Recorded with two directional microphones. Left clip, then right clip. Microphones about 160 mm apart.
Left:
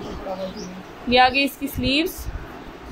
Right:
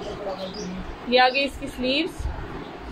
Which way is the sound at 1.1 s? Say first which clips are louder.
Left 2 dB; 80° left.